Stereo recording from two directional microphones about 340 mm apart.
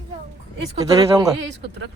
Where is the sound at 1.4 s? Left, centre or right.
Right.